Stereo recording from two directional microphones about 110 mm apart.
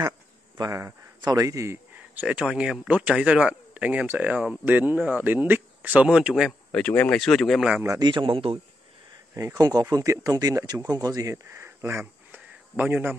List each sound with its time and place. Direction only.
0.6 s a man's voice: 30° right (ahead or behind)
2.0 s speech: 10° right (ahead or behind)
6.7 s speech: 15° left (ahead or behind); by 7.8 s 5° right (ahead or behind)
8.0 s a man's voice: 45° right (ahead or behind)
9.3 s speech: 30° right (ahead or behind)